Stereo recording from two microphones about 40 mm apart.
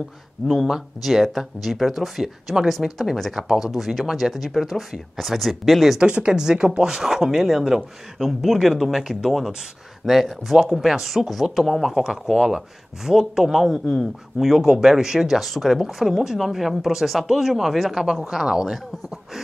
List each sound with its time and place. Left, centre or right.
1.0 s speech: centre
5.9 s speech: right
6.3 s speech: centre
10.8 s speech: centre